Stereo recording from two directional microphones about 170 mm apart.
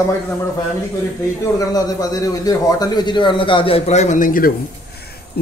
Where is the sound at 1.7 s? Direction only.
20° left (ahead or behind); by 4.5 s 55° left (ahead or behind).